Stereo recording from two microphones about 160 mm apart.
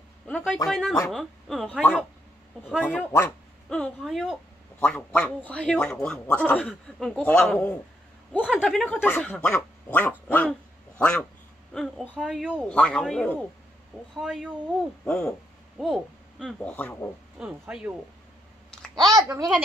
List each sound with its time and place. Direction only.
0.3 s a sound: 5° left (ahead or behind)
0.7 s speech: centre (ahead or behind)
3.1 s speech: 15° left (ahead or behind); by 12.6 s 5° right (ahead or behind)
12.6 s speech: 5° left (ahead or behind)
17.4 s speech: 5° right (ahead or behind)
19.0 s a sound: 20° right (ahead or behind)